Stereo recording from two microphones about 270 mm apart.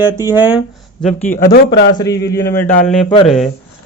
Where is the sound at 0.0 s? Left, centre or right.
Centre.